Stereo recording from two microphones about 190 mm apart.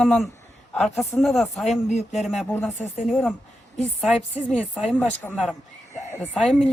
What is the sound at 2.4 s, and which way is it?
Speech, 10° left (ahead or behind).